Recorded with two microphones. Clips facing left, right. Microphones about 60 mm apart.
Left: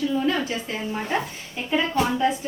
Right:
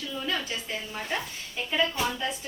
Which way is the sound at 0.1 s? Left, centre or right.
Left.